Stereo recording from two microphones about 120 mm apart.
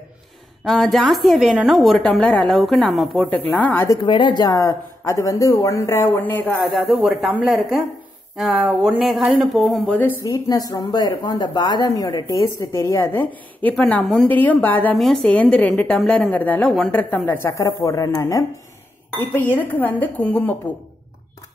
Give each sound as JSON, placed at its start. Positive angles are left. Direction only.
{"t": 0.7, "sound": "a woman's voice", "side_deg": 0}
{"t": 3.8, "sound": "speech", "side_deg": 35}
{"t": 6.8, "sound": "a woman's voice", "side_deg": 0}
{"t": 10.3, "sound": "a woman's voice", "side_deg": 30}
{"t": 15.0, "sound": "a woman's voice", "side_deg": 0}
{"t": 19.3, "sound": "a woman's voice", "side_deg": 15}